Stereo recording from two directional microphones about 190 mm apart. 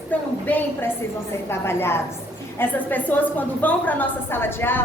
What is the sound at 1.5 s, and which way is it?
A woman's voice, 15° left (ahead or behind).